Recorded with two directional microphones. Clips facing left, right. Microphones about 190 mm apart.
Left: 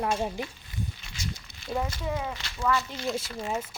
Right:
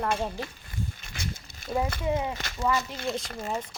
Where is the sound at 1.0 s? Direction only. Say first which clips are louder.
Right 1 dB; 55° right (ahead or behind).